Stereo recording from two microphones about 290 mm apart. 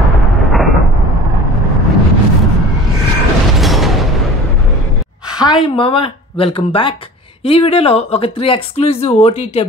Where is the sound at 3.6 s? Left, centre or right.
Centre.